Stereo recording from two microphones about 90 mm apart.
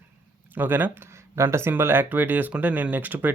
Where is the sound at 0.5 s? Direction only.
20° right (ahead or behind).